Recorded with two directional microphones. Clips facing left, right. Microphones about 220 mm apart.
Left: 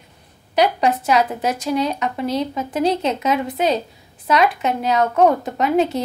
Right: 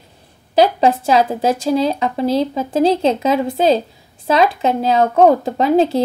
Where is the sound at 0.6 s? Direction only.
30° right (ahead or behind).